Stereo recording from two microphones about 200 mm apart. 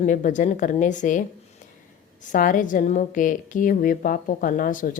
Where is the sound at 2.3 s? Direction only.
40° left (ahead or behind).